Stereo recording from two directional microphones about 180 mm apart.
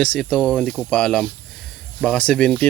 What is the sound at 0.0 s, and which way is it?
Speech, 5° left (ahead or behind).